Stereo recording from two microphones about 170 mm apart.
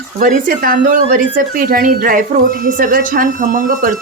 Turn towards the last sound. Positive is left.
turn(degrees=-50)  # may be behind; listen again after turning